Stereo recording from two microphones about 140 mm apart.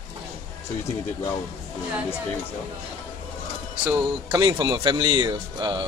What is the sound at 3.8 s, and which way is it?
Speech, 25° right (ahead or behind).